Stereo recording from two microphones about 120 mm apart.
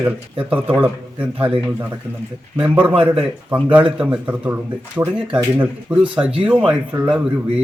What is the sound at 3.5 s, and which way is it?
Speech, 40° right (ahead or behind).